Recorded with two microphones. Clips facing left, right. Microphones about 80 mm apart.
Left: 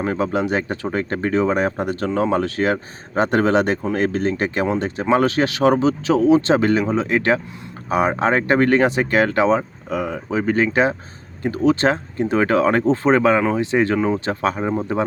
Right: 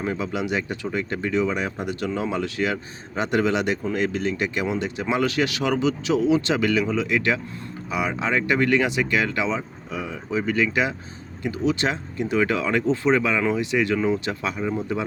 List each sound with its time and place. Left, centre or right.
0.0 s speech: left